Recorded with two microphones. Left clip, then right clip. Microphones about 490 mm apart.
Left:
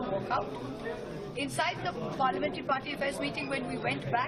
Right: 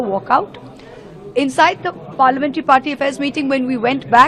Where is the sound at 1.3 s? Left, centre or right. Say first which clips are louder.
Right 19 dB; right.